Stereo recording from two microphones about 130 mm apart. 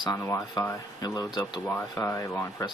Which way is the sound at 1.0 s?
30° left (ahead or behind).